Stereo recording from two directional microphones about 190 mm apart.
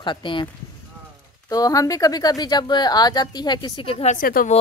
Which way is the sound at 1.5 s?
20° left (ahead or behind).